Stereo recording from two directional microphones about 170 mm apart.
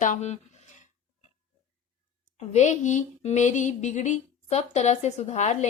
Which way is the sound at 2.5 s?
45° left (ahead or behind).